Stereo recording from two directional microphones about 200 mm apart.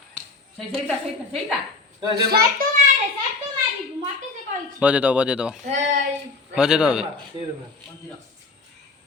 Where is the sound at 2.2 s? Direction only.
50° right (ahead or behind).